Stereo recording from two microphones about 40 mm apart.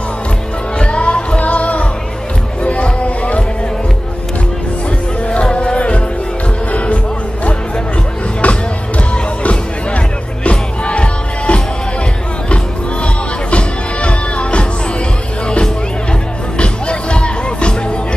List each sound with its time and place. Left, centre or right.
0.7 s music: left
5.3 s music: left
8.4 s music: left
13.0 s music: left